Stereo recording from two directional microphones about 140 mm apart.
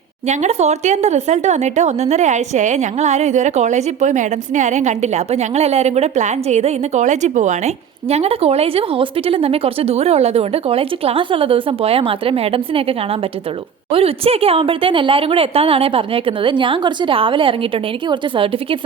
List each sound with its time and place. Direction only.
0.3 s speech: 55° right (ahead or behind)